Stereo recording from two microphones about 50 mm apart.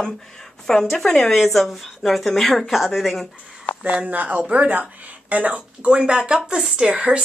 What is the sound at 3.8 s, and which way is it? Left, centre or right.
Speech, right.